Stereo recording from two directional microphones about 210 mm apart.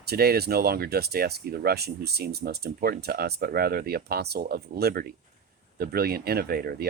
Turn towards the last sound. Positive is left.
turn(degrees=-50)  # may be behind; listen again after turning